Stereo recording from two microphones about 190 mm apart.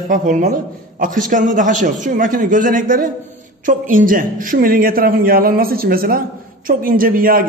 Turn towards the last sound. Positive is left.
turn(degrees=-50)  # may be behind; listen again after turning